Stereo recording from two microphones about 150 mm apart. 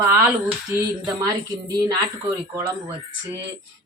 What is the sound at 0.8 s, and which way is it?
Speech, 25° right (ahead or behind).